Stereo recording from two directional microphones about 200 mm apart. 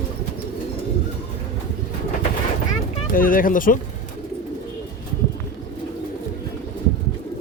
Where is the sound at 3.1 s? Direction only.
45° left (ahead or behind).